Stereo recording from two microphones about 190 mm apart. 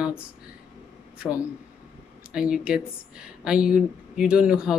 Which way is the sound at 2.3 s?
5° right (ahead or behind).